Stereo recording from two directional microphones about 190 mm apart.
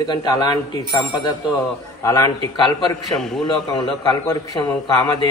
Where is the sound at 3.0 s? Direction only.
Centre (ahead or behind).